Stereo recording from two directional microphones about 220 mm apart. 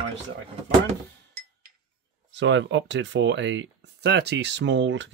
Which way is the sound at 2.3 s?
55° right (ahead or behind).